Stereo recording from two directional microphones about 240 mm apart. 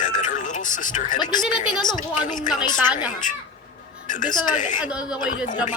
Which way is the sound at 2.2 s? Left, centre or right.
Left.